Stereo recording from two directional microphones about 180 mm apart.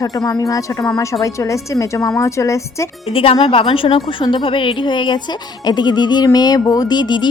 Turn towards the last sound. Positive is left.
turn(degrees=25)  # may be behind; listen again after turning